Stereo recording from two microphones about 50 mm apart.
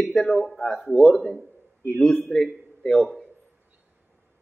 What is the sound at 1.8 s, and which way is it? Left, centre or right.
Speech, left.